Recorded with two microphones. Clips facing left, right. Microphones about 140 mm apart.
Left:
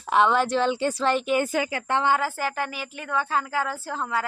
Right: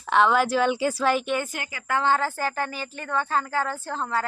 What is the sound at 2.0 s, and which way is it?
Speech, 10° left (ahead or behind).